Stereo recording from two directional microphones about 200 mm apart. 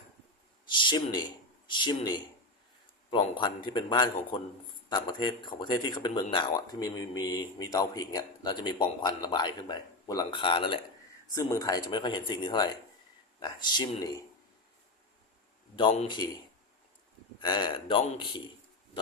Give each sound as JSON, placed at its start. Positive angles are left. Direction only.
{"t": 0.7, "sound": "a sound", "side_deg": 25}
{"t": 1.6, "sound": "speech", "side_deg": 25}
{"t": 15.7, "sound": "speech", "side_deg": 25}
{"t": 17.4, "sound": "speech", "side_deg": 20}